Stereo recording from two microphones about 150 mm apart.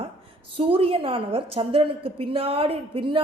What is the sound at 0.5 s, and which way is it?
A woman's voice, 40° right (ahead or behind).